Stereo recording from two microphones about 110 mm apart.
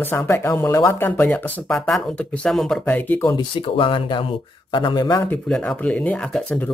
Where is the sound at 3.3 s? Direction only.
45° left (ahead or behind).